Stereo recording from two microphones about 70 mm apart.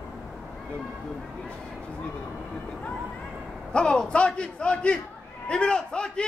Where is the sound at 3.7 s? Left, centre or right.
Centre.